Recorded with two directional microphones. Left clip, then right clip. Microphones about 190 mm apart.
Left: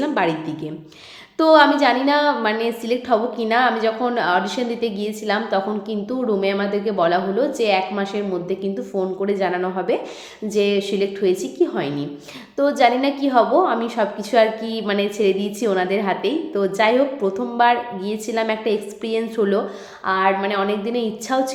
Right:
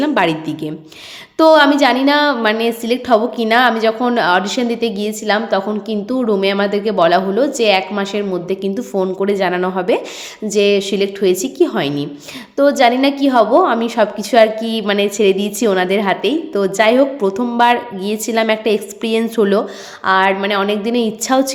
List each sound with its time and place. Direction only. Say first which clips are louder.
0.0 s a woman's voice: right 5 dB; 35° right (ahead or behind)